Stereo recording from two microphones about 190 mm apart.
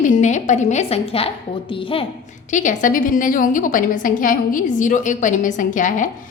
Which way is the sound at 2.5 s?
40° left (ahead or behind).